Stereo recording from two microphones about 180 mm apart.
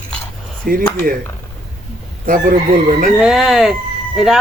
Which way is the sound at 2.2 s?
50° right (ahead or behind).